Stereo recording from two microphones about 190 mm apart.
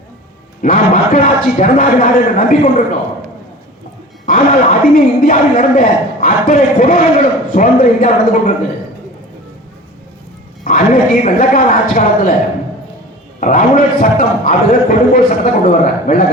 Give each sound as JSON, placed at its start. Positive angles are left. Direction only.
{"t": 0.6, "sound": "a man's voice", "side_deg": 45}
{"t": 4.3, "sound": "a man's voice", "side_deg": 45}
{"t": 10.6, "sound": "a man's voice", "side_deg": 45}
{"t": 13.4, "sound": "a man's voice", "side_deg": 45}